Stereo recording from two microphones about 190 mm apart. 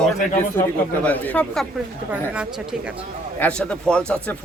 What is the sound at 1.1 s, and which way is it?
Speech, 5° left (ahead or behind).